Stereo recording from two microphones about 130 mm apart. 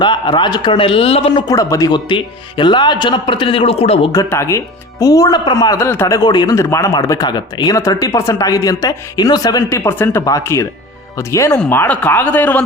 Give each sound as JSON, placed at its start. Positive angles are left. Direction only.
{"t": 0.0, "sound": "a man's voice", "side_deg": 35}
{"t": 1.5, "sound": "speech", "side_deg": 25}
{"t": 2.0, "sound": "a man's voice", "side_deg": 40}
{"t": 4.1, "sound": "speech", "side_deg": 25}
{"t": 6.1, "sound": "speech", "side_deg": 30}